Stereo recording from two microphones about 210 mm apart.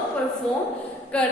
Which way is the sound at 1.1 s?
5° left (ahead or behind).